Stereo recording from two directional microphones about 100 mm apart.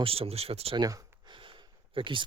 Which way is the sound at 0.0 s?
75° right (ahead or behind).